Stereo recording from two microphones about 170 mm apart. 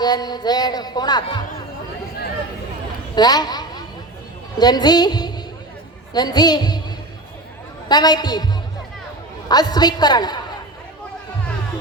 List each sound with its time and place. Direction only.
0.0 s speech: 25° left (ahead or behind)
3.2 s a sound: 25° left (ahead or behind)
4.5 s speech: 25° left (ahead or behind)
7.9 s speech: 25° left (ahead or behind)
9.5 s speech: 25° left (ahead or behind)